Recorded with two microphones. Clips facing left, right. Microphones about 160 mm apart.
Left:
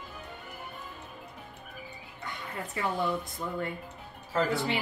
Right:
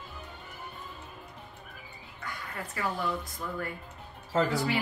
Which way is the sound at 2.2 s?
25° left (ahead or behind).